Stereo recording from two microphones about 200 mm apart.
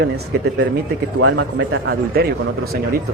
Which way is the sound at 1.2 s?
75° right (ahead or behind).